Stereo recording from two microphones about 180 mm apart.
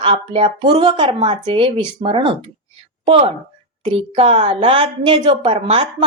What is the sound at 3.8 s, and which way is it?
A woman's voice, 30° right (ahead or behind).